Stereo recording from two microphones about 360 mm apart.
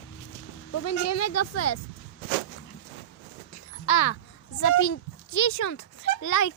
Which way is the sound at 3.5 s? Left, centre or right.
Left.